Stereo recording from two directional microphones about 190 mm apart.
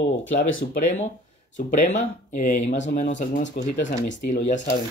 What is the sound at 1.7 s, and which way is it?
Speech, 40° left (ahead or behind).